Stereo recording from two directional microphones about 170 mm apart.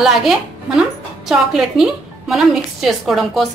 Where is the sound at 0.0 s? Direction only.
Centre (ahead or behind).